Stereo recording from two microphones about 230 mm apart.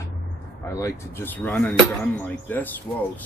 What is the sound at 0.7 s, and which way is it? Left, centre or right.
Speech, centre.